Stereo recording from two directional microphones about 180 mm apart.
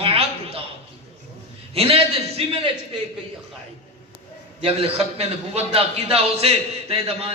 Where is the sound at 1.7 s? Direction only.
35° right (ahead or behind).